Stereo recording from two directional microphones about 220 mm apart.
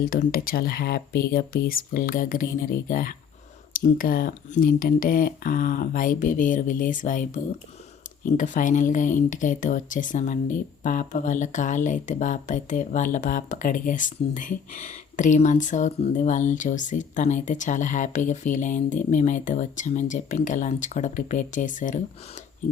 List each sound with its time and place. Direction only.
0.0 s speech: 40° left (ahead or behind)